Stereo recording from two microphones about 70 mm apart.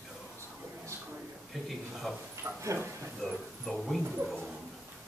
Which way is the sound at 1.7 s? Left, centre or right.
Centre.